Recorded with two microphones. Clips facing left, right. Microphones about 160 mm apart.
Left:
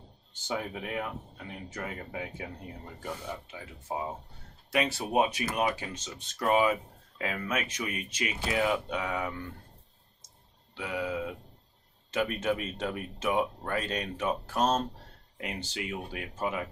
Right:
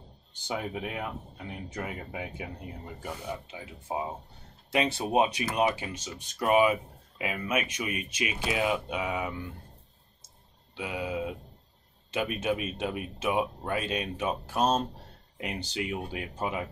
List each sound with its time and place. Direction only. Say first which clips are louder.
0.3 s speech: right 1 dB; 15° right (ahead or behind)
10.8 s speech: even; 15° right (ahead or behind)